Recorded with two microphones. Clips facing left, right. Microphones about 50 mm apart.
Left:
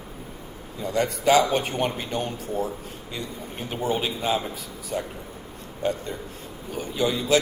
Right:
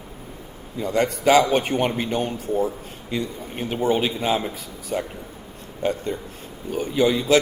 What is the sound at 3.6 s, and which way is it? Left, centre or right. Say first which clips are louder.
Speech: right 5 dB; right.